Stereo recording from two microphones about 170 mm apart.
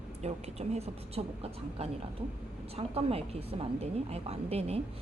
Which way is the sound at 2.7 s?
35° right (ahead or behind).